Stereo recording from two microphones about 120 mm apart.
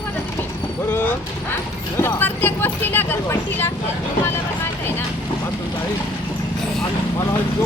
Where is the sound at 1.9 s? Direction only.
15° left (ahead or behind).